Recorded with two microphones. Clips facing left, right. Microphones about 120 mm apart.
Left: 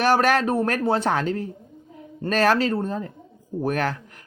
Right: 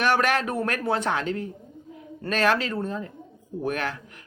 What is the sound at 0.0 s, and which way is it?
Speech, 35° left (ahead or behind).